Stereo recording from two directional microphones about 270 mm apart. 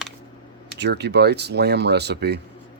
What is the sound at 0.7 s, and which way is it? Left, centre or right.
Speech, right.